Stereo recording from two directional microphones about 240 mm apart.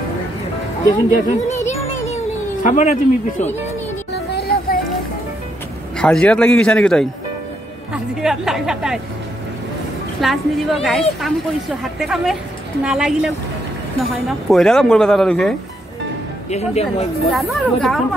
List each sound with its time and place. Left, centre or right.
0.8 s a man's voice: left
2.6 s a man's voice: left
4.1 s music: left
5.9 s a man's voice: centre
10.2 s a man's voice: centre
14.5 s a man's voice: centre
16.4 s speech: left
17.3 s a man's voice: centre